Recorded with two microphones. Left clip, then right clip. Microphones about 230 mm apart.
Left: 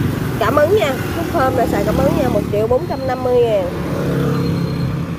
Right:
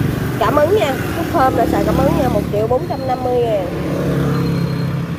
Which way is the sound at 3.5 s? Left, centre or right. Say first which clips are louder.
Left 1 dB; left.